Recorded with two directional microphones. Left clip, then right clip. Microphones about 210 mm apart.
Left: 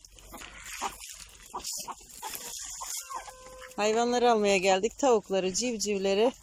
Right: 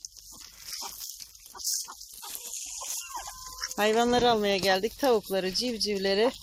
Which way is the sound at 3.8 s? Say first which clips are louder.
Right 2 dB; centre (ahead or behind).